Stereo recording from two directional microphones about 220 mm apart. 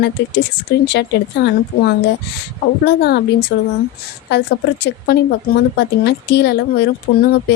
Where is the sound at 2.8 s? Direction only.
50° left (ahead or behind).